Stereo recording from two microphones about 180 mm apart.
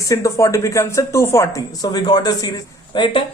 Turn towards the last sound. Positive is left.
turn(degrees=25)  # may be behind; listen again after turning